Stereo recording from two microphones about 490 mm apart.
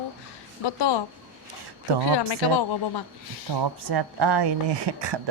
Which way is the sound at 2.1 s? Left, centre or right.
Left.